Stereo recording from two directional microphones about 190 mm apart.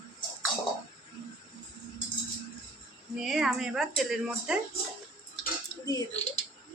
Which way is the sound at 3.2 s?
5° right (ahead or behind).